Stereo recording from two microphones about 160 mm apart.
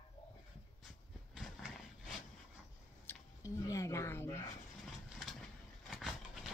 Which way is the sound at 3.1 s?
20° left (ahead or behind).